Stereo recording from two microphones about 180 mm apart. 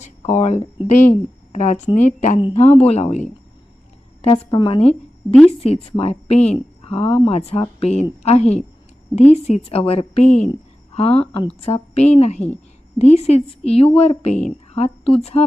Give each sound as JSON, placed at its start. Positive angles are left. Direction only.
{"t": 0.2, "sound": "a woman's voice", "side_deg": 35}